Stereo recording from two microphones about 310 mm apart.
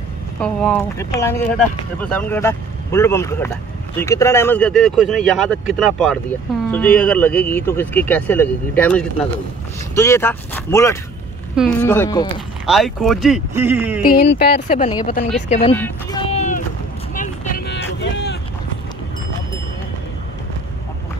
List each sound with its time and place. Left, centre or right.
0.4 s speech: centre
12.6 s speech: centre
14.0 s speech: left
15.7 s speech: centre
16.3 s a sound: left
17.1 s vehicle: left